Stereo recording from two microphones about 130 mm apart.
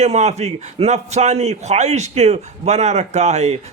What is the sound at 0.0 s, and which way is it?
A man's voice, 60° right (ahead or behind).